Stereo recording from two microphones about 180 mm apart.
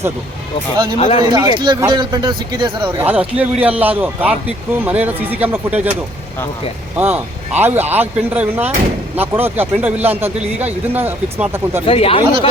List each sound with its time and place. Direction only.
0.9 s speech: 35° left (ahead or behind)
1.3 s speech: 25° right (ahead or behind)
3.0 s speech: 10° right (ahead or behind)
6.9 s speech: 10° right (ahead or behind)
11.9 s speech: 30° left (ahead or behind)